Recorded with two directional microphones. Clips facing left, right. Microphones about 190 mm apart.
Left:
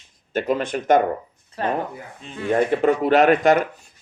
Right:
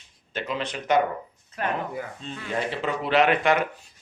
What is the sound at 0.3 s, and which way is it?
Speech, 50° left (ahead or behind).